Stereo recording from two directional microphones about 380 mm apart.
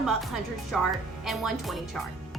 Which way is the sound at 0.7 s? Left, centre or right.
Centre.